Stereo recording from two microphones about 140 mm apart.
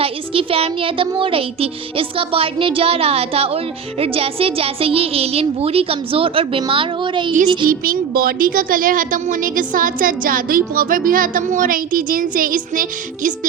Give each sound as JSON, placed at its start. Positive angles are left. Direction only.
{"t": 0.0, "sound": "a child's voice", "side_deg": -45}
{"t": 7.7, "sound": "speech", "side_deg": -90}